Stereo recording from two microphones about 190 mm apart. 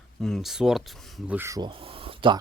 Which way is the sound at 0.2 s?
Centre (ahead or behind).